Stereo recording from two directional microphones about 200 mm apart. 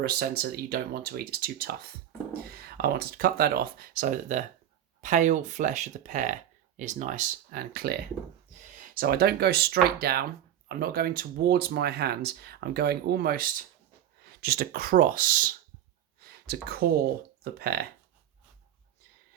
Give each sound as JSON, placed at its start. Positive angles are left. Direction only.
{"t": 0.0, "sound": "speech", "side_deg": -50}